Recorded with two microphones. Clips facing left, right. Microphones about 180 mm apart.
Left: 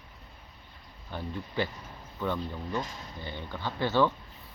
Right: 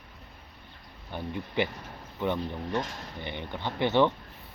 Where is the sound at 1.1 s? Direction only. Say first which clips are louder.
Right 2 dB; 20° right (ahead or behind).